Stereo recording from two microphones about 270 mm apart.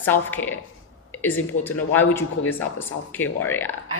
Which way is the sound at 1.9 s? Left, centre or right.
Centre.